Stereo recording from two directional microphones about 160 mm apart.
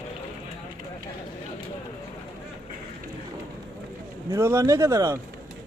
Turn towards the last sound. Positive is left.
turn(degrees=-20)  # may be behind; listen again after turning